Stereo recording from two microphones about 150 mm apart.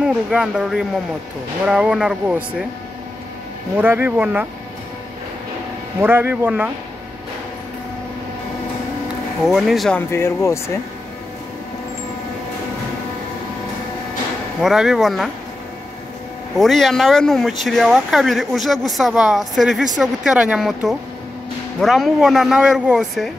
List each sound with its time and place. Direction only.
0.0 s speech: 5° right (ahead or behind)
3.7 s a man's voice: 10° right (ahead or behind)
5.9 s a man's voice: 15° right (ahead or behind)
9.4 s speech: centre (ahead or behind)
9.9 s speech: 15° left (ahead or behind)
14.6 s speech: 5° right (ahead or behind)
16.5 s speech: centre (ahead or behind)